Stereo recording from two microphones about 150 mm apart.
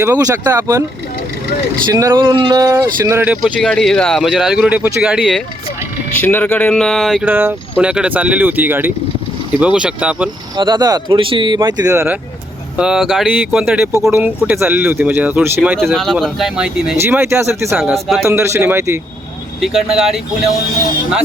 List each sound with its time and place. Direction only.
0.0 s speech: 20° right (ahead or behind)
1.9 s speech: 20° right (ahead or behind)
3.4 s speech: 5° left (ahead or behind)
6.2 s speech: 10° left (ahead or behind); by 10.2 s 10° right (ahead or behind)
10.6 s speech: 30° right (ahead or behind)
12.7 s speech: 5° right (ahead or behind)
15.8 s speech: centre (ahead or behind)
17.0 s speech: 15° right (ahead or behind)
19.6 s speech: centre (ahead or behind)